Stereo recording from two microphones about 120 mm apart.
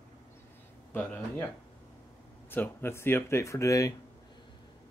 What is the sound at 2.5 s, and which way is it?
Speech, 15° left (ahead or behind).